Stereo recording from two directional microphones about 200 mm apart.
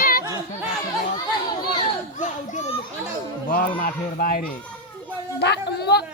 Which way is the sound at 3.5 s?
45° left (ahead or behind).